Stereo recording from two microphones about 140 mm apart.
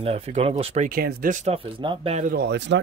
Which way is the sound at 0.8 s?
90° right.